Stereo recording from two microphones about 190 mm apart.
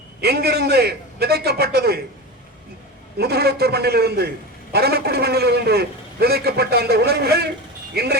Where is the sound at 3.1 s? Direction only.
55° right (ahead or behind).